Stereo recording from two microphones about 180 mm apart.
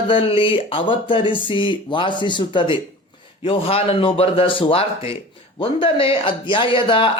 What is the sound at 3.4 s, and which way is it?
A man's voice, 30° left (ahead or behind).